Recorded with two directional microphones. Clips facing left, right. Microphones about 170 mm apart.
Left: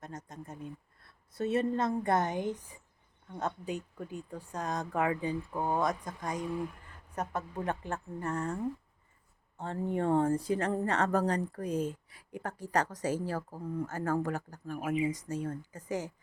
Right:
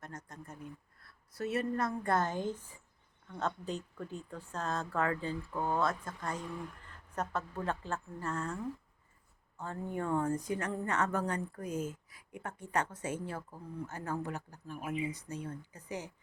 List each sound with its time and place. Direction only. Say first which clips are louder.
0.0 s a woman's voice: left 3 dB; 20° left (ahead or behind)
9.6 s speech: left 5 dB; 30° left (ahead or behind); by 14.8 s 45° left (ahead or behind)
14.8 s speech: left 5 dB; 90° left
15.0 s speech: left 6 dB; 40° left (ahead or behind)